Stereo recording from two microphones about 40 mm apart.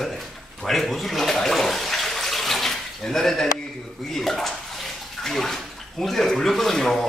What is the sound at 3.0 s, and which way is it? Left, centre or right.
Speech, centre.